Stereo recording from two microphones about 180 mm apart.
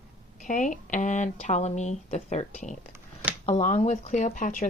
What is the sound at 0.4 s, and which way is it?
A woman's voice, 45° left (ahead or behind).